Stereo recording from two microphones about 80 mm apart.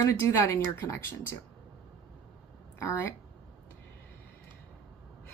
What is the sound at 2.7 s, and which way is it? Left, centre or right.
Speech, left.